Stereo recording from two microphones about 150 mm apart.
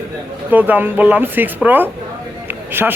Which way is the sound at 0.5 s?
10° right (ahead or behind).